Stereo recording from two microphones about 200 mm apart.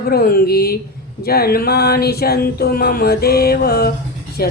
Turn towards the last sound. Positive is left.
turn(degrees=50)  # may be behind; listen again after turning